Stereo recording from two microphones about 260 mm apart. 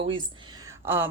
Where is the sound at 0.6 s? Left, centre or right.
Centre.